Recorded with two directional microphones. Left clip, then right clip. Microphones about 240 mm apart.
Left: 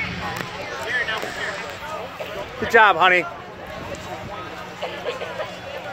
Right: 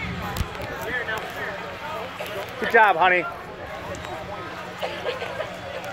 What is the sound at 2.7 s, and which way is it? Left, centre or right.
Speech, left.